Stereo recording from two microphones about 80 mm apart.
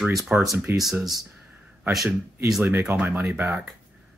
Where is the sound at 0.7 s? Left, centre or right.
Right.